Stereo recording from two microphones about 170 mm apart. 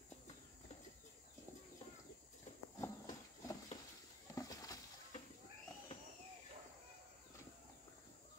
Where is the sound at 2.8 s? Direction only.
20° left (ahead or behind).